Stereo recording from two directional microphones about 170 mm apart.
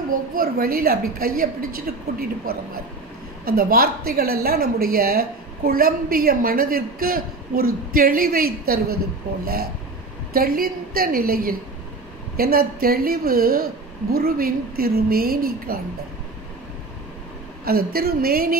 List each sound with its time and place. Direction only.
0.1 s a woman's voice: 55° right (ahead or behind)
10.3 s a woman's voice: 60° right (ahead or behind)
17.6 s a woman's voice: 65° right (ahead or behind)